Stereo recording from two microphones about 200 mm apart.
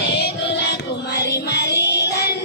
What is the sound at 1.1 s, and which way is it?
Music, 55° left (ahead or behind).